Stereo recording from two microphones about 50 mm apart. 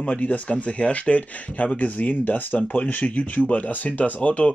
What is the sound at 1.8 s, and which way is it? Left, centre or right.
Speech, left.